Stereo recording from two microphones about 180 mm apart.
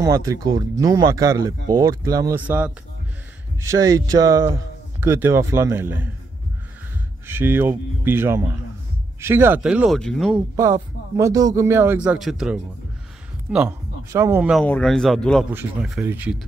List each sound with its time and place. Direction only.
0.0 s speech: 20° right (ahead or behind)
7.2 s a man's voice: 10° right (ahead or behind)
10.5 s a man's voice: 20° right (ahead or behind)
14.5 s a man's voice: 5° left (ahead or behind)